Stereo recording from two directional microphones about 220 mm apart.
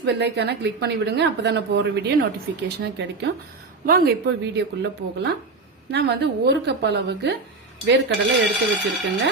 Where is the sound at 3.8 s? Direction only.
40° right (ahead or behind).